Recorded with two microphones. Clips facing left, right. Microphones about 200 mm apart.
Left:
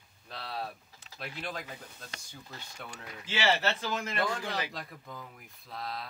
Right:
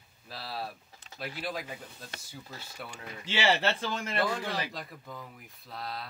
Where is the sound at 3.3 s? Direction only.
30° right (ahead or behind).